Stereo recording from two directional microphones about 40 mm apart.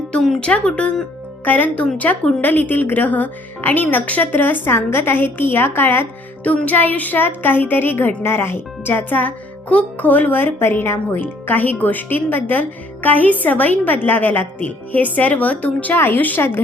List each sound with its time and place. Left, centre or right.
0.3 s speech: left
1.5 s a woman's voice: left
2.4 s a woman's voice: left
4.0 s a woman's voice: left
4.3 s a woman's voice: left
4.7 s a woman's voice: left
6.7 s a woman's voice: left
8.9 s a woman's voice: left
16.0 s a woman's voice: left